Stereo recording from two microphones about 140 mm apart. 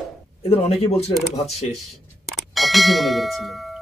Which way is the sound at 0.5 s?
45° left (ahead or behind).